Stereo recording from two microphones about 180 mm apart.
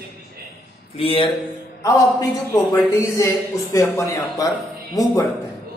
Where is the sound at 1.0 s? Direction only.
30° left (ahead or behind).